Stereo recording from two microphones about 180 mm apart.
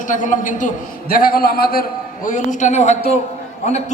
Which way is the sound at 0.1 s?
45° left (ahead or behind).